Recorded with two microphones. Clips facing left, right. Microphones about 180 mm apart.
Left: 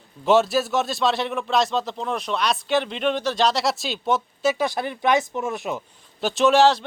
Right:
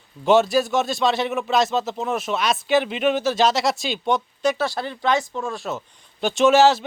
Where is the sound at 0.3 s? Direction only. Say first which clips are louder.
Right 2 dB; centre (ahead or behind).